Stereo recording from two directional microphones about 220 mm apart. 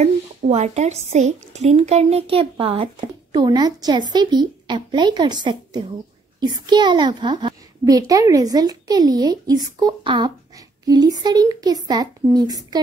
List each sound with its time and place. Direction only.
0.0 s a woman's voice: 30° right (ahead or behind)